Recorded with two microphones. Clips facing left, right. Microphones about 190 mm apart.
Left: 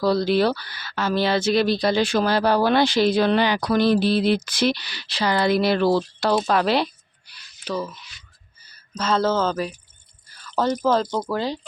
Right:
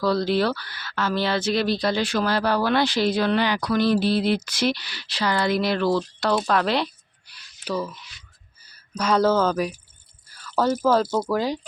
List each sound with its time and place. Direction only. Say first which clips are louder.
0.0 s speech: left 2 dB; 15° left (ahead or behind); by 6.1 s 30° left (ahead or behind)
6.4 s speech: left 2 dB; 5° left (ahead or behind)
7.3 s a sound: even; 5° right (ahead or behind)
8.6 s speech: right 1 dB; 10° right (ahead or behind)